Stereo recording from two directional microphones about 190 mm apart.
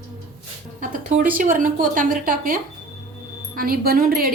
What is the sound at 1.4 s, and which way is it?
Speech, 45° right (ahead or behind).